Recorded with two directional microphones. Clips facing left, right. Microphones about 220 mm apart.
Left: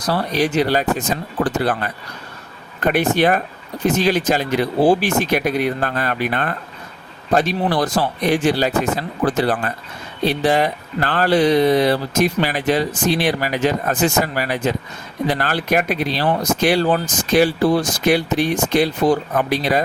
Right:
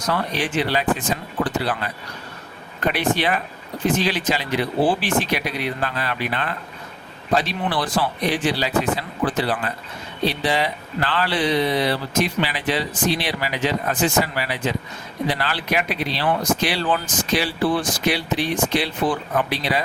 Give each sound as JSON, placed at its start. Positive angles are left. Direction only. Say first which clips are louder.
{"t": 0.0, "sound": "speech", "louder": "left 5 dB", "side_deg": 35}